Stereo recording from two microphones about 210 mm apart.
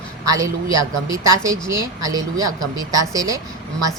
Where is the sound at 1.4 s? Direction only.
15° right (ahead or behind).